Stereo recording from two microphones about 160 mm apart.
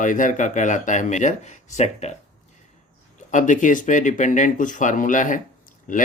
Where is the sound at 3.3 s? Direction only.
55° left (ahead or behind).